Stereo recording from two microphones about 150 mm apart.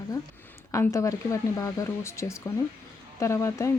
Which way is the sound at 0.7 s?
20° left (ahead or behind).